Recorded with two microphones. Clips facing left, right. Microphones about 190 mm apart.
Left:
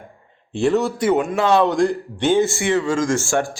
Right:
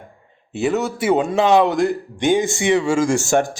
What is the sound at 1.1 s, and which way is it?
Speech, 30° right (ahead or behind).